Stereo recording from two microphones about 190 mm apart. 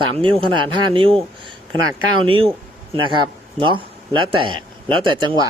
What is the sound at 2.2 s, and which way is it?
A man's voice, 30° right (ahead or behind).